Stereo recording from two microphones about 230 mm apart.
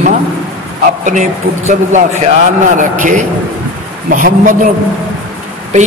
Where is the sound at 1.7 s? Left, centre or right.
Right.